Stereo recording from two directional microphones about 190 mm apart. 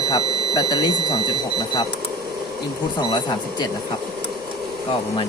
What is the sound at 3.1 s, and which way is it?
Speech, 25° left (ahead or behind).